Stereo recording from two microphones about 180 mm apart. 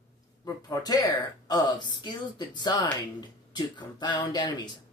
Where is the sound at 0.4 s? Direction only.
20° left (ahead or behind).